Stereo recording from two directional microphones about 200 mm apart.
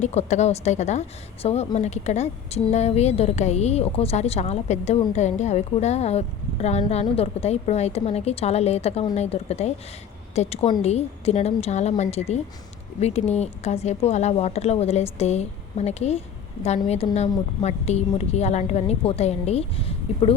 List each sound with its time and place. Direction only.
0.0 s a woman's voice: 35° left (ahead or behind)